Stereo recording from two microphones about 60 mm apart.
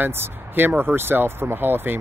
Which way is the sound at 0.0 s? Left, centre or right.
Right.